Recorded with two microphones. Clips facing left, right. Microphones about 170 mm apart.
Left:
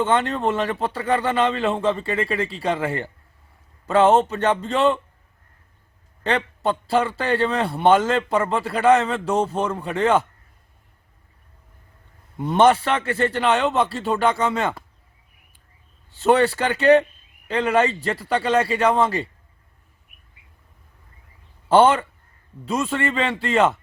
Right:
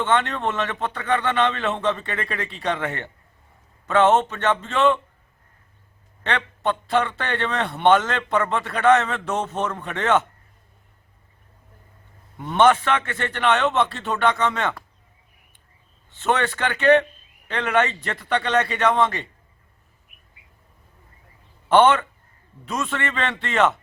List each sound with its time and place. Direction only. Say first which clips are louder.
0.0 s a man's voice: left 2 dB; 35° left (ahead or behind)
4.1 s a man's voice: left 2 dB; 35° left (ahead or behind)
6.2 s a man's voice: left 2 dB; 35° left (ahead or behind)
9.6 s speech: left 4 dB; 10° left (ahead or behind)
12.5 s a man's voice: left 1 dB; 35° left (ahead or behind)
16.1 s a man's voice: left 6 dB; 35° left (ahead or behind)
21.7 s a man's voice: left 1 dB; 30° left (ahead or behind)